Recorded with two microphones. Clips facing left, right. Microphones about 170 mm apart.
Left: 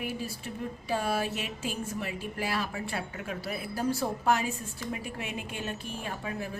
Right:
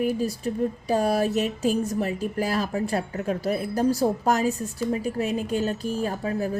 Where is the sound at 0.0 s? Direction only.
40° right (ahead or behind).